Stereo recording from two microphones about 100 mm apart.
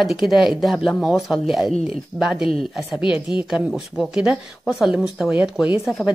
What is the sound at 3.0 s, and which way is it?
Speech, 55° left (ahead or behind).